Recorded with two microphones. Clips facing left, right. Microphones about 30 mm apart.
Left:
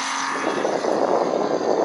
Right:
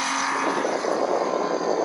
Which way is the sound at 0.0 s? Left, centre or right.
Centre.